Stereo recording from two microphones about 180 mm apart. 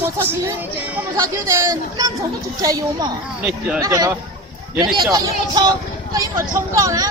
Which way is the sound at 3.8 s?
20° right (ahead or behind).